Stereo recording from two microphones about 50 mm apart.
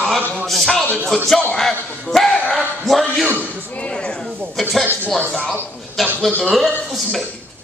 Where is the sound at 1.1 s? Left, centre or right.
Centre.